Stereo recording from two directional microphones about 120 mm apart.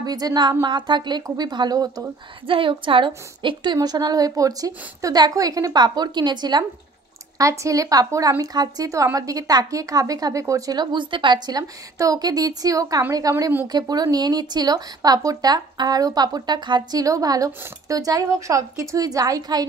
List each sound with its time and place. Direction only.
0.0 s speech: 35° right (ahead or behind)
2.4 s a woman's voice: 45° right (ahead or behind)